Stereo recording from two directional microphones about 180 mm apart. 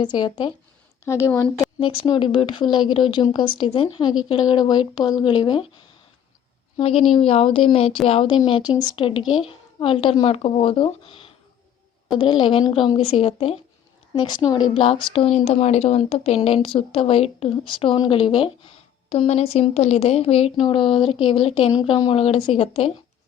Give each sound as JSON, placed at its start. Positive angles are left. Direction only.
{"t": 0.0, "sound": "speech", "side_deg": 25}
{"t": 1.8, "sound": "speech", "side_deg": 25}
{"t": 6.7, "sound": "a woman's voice", "side_deg": 30}